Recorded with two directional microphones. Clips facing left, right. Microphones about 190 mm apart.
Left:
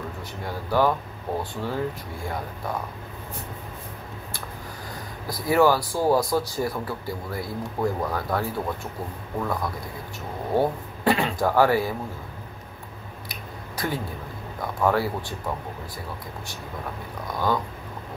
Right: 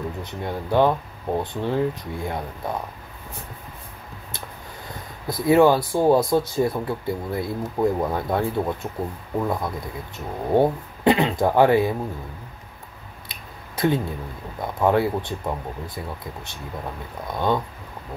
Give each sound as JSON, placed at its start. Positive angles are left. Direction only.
{"t": 0.2, "sound": "speech", "side_deg": -20}
{"t": 5.2, "sound": "speech", "side_deg": -25}
{"t": 13.3, "sound": "a sound", "side_deg": -25}
{"t": 14.6, "sound": "speech", "side_deg": -20}
{"t": 17.3, "sound": "speech", "side_deg": -25}